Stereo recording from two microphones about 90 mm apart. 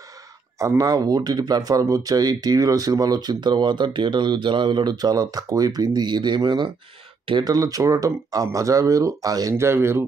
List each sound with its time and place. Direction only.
0.6 s speech: 40° right (ahead or behind); by 6.7 s 60° right (ahead or behind)
7.4 s speech: 45° right (ahead or behind)
9.6 s speech: 30° right (ahead or behind)